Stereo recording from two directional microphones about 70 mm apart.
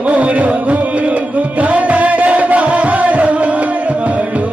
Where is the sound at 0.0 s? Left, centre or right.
Right.